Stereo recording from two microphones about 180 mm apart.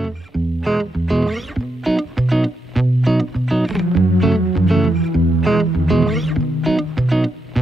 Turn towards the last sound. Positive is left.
turn(degrees=0)  # may be behind; listen again after turning